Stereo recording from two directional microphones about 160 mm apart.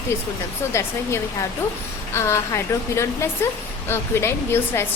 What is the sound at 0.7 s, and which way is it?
Speech, 15° left (ahead or behind).